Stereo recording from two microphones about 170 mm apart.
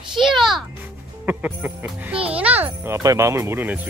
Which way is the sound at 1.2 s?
10° right (ahead or behind).